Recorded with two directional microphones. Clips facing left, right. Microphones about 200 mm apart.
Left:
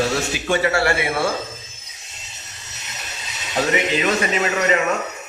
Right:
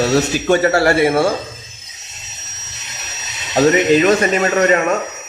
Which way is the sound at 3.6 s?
45° right (ahead or behind).